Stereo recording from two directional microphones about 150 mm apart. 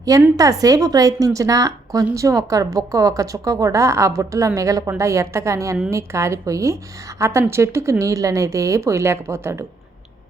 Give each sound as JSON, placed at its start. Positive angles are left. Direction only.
{"t": 0.3, "sound": "a woman's voice", "side_deg": -25}